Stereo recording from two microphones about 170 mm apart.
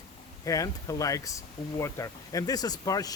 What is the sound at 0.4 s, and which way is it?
Speech, 20° left (ahead or behind).